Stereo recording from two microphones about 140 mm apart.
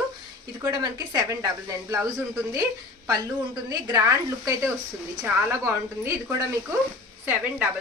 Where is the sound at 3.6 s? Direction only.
30° right (ahead or behind).